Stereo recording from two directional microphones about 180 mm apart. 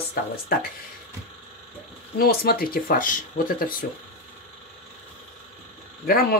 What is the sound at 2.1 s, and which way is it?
Speech, 55° left (ahead or behind).